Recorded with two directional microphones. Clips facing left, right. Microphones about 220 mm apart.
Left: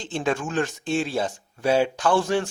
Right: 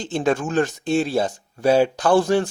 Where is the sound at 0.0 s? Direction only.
40° right (ahead or behind).